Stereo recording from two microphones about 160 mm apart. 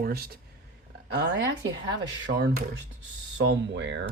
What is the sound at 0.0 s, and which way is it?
Speech, 70° right (ahead or behind).